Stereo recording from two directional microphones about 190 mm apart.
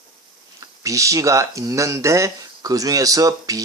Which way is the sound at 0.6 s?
15° right (ahead or behind).